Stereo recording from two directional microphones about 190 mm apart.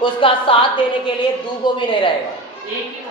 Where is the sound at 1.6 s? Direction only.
25° left (ahead or behind).